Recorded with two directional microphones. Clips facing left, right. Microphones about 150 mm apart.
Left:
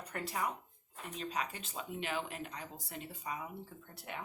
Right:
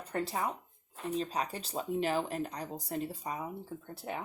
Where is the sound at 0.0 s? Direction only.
30° right (ahead or behind).